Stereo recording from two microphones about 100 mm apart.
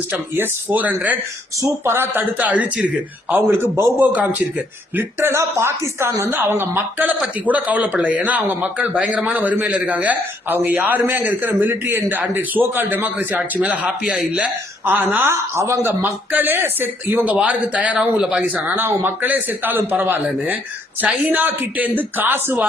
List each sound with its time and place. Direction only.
0.1 s a man's voice: 20° right (ahead or behind)
4.0 s a man's voice: 15° right (ahead or behind)
21.3 s speech: 15° right (ahead or behind)